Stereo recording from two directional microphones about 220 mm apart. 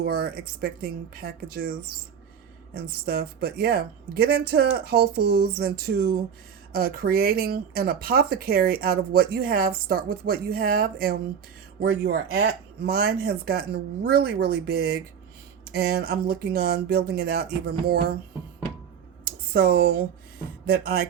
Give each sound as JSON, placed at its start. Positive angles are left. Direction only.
{"t": 0.0, "sound": "speech", "side_deg": -45}
{"t": 2.7, "sound": "speech", "side_deg": -45}
{"t": 19.2, "sound": "a sound", "side_deg": -45}
{"t": 20.7, "sound": "speech", "side_deg": -45}